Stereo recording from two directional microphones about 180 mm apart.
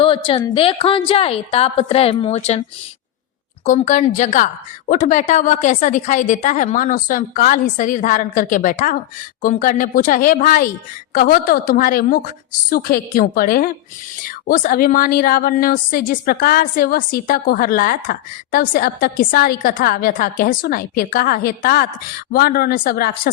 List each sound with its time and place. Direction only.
0.0 s a woman's voice: 30° left (ahead or behind)
3.7 s a woman's voice: 40° left (ahead or behind)